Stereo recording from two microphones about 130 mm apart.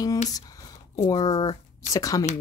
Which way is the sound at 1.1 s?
30° left (ahead or behind).